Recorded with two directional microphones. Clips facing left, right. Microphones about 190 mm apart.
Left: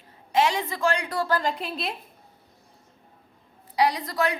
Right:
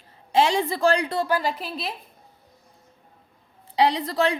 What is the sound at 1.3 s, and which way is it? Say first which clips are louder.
Speech: right 1 dB; 5° right (ahead or behind).